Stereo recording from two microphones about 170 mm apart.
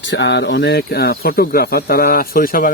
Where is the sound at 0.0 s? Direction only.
90° left.